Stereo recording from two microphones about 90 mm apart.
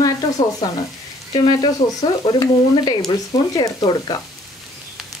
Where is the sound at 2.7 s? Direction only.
60° left (ahead or behind).